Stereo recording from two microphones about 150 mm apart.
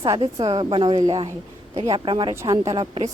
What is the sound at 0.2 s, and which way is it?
A woman's voice, 35° right (ahead or behind).